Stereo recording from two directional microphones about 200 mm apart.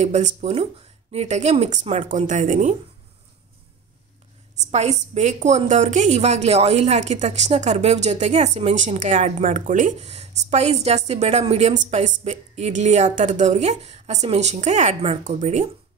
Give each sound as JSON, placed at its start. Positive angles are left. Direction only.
{"t": 0.0, "sound": "a woman's voice", "side_deg": -35}
{"t": 4.6, "sound": "a woman's voice", "side_deg": -35}